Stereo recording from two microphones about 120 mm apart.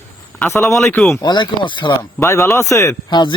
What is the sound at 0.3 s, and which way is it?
Speech, 20° left (ahead or behind).